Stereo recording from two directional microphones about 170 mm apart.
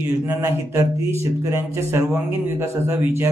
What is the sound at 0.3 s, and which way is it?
Speech, 15° right (ahead or behind).